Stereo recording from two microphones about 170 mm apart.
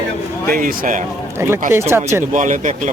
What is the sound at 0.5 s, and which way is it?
Speech, 55° right (ahead or behind).